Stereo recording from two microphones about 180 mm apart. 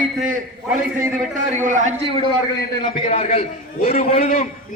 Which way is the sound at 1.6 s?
45° right (ahead or behind).